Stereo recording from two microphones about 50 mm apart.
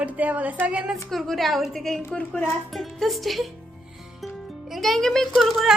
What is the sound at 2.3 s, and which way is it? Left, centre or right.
Speech, left.